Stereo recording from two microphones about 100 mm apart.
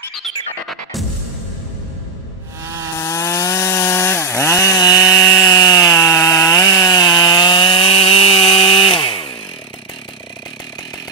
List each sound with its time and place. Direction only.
0.1 s music: centre (ahead or behind)
2.6 s chainsaw: 30° right (ahead or behind)
3.0 s chainsaw: 30° left (ahead or behind)
5.2 s wood: 30° left (ahead or behind)
5.6 s chainsaw: 35° left (ahead or behind); by 9.3 s 60° left (ahead or behind)